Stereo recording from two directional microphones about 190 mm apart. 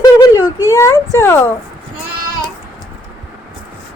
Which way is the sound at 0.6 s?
15° left (ahead or behind).